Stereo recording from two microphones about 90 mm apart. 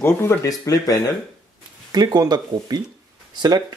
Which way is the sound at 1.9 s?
45° right (ahead or behind).